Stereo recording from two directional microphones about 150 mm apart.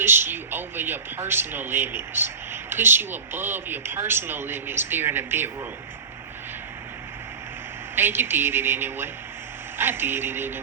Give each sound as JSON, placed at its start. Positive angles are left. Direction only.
{"t": 0.0, "sound": "speech", "side_deg": -15}
{"t": 7.9, "sound": "speech", "side_deg": -15}